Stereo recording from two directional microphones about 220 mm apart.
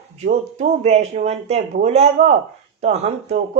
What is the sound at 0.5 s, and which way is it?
Speech, 30° right (ahead or behind).